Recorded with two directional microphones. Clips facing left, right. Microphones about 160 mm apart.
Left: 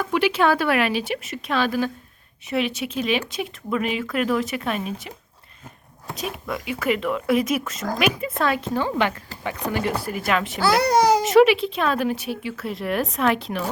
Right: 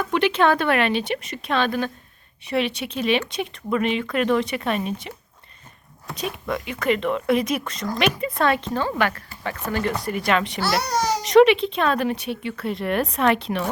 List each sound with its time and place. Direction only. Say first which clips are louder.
0.0 s speech: right 1 dB; 5° left (ahead or behind)
6.1 s speech: right 2 dB; centre (ahead or behind)
8.7 s speech: left 1 dB; 15° left (ahead or behind)